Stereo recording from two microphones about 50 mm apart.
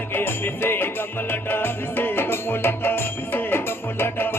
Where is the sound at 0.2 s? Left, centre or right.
Left.